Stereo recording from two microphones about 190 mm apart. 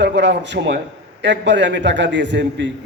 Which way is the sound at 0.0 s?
65° right (ahead or behind).